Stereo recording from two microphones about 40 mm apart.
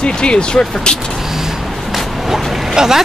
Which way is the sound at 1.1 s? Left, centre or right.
Centre.